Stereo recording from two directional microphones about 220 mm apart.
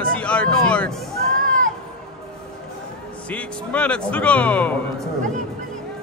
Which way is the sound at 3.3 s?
5° left (ahead or behind).